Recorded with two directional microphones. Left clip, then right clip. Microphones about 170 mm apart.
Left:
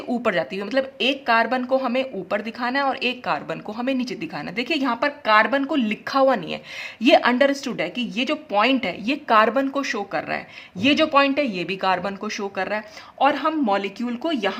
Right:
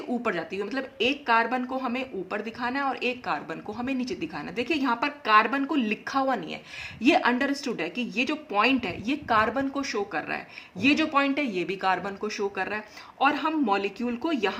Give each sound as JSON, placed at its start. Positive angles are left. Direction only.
{"t": 0.1, "sound": "speech", "side_deg": 35}